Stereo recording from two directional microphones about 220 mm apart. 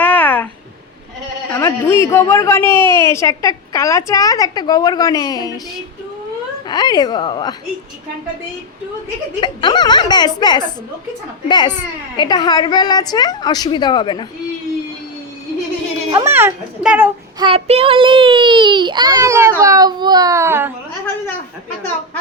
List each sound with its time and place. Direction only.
0.0 s a sound: 5° left (ahead or behind)
1.5 s a man's voice: 10° left (ahead or behind)
9.4 s a woman's voice: 20° left (ahead or behind)
16.1 s speech: 10° right (ahead or behind)
17.4 s a child's voice: 25° right (ahead or behind); by 20.7 s 10° right (ahead or behind)